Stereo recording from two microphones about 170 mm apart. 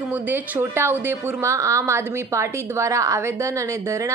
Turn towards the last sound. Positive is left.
turn(degrees=-15)  # may be behind; listen again after turning